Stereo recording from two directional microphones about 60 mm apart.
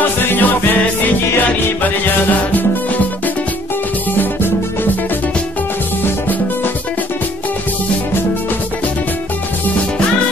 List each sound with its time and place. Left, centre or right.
0.2 s music: left
6.0 s music: left